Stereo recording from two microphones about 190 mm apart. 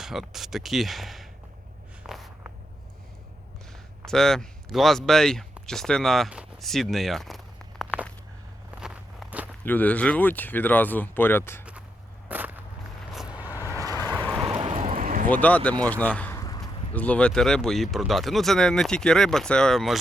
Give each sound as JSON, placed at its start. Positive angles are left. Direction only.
{"t": 0.0, "sound": "speech", "side_deg": 0}
{"t": 2.0, "sound": "walk", "side_deg": 0}
{"t": 4.0, "sound": "speech", "side_deg": 0}
{"t": 8.7, "sound": "walk", "side_deg": -5}
{"t": 9.6, "sound": "speech", "side_deg": 10}
{"t": 12.3, "sound": "walk", "side_deg": -10}
{"t": 13.3, "sound": "vehicle", "side_deg": -10}
{"t": 14.3, "sound": "vehicle", "side_deg": 0}
{"t": 14.9, "sound": "a sound", "side_deg": -45}
{"t": 15.3, "sound": "speech", "side_deg": 10}
{"t": 15.8, "sound": "a sound", "side_deg": 10}
{"t": 16.9, "sound": "speech", "side_deg": 10}